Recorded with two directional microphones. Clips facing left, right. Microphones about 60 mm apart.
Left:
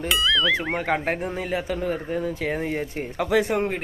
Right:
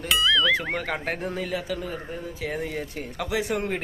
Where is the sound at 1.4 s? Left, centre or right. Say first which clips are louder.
Left 3 dB; left.